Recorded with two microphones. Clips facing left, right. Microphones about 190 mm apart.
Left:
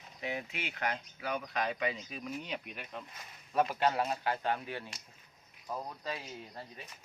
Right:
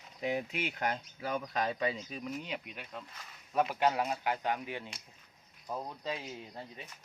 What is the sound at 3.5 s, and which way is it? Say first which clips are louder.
Speech: even; 10° right (ahead or behind).